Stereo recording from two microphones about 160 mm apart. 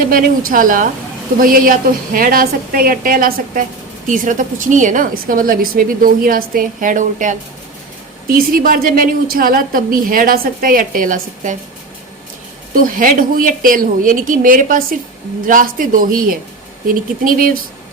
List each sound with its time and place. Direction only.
0.1 s a woman's voice: 60° right (ahead or behind)
8.3 s a woman's voice: 65° right (ahead or behind)
12.7 s a woman's voice: 60° right (ahead or behind)